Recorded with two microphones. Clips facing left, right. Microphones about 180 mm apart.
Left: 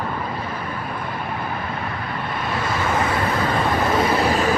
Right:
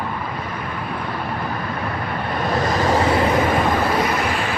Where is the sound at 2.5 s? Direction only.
40° right (ahead or behind).